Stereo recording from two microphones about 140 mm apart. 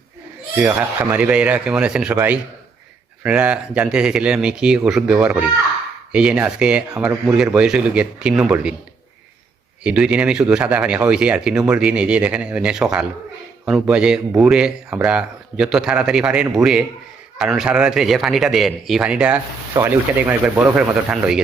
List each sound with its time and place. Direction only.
0.7 s speech: 15° right (ahead or behind)
9.8 s a man's voice: 10° right (ahead or behind)